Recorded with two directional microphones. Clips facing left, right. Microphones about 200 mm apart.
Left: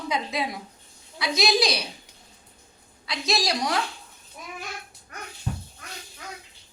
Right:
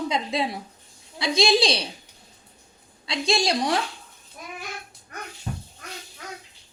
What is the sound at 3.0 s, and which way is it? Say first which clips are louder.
Speech: right 3 dB; 30° right (ahead or behind).